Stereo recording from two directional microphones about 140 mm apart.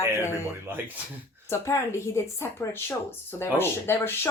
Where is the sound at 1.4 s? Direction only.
20° left (ahead or behind).